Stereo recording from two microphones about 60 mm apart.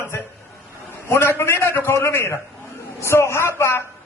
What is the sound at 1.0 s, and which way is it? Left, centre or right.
A man's voice, left.